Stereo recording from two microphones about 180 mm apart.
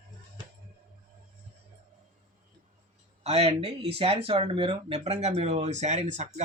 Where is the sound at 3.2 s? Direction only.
35° right (ahead or behind).